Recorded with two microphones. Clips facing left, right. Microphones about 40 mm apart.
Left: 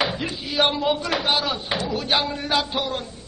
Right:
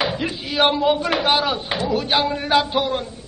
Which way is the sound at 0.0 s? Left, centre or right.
Centre.